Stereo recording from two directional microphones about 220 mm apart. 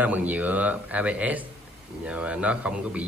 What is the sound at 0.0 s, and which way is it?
Speech, 5° right (ahead or behind).